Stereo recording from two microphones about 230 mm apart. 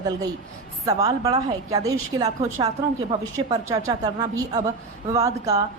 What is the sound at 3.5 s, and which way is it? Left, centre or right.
A woman's voice, centre.